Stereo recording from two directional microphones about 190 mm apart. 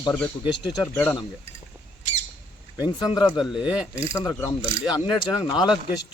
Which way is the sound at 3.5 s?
5° right (ahead or behind).